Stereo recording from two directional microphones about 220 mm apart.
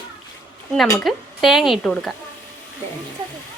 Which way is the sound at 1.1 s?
Centre (ahead or behind).